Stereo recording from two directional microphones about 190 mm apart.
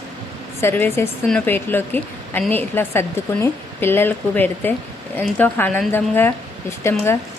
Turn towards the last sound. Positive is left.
turn(degrees=15)  # may be behind; listen again after turning